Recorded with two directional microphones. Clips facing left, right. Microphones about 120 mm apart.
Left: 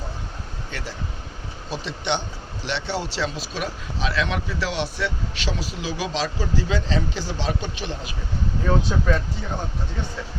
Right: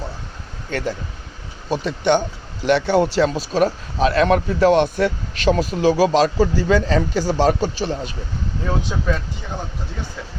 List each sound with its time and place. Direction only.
0.7 s a man's voice: 50° right (ahead or behind)
3.2 s speech: 45° right (ahead or behind)
9.1 s speech: 5° right (ahead or behind)